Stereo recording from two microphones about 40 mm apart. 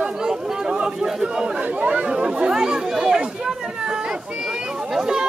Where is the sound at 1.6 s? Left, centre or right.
Right; by 5.2 s centre.